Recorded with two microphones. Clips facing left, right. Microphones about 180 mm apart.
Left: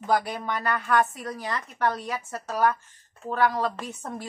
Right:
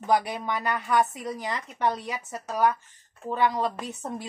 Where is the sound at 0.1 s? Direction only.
15° right (ahead or behind).